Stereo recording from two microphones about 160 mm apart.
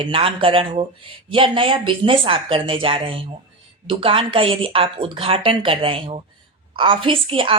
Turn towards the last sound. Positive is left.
turn(degrees=-35)  # may be behind; listen again after turning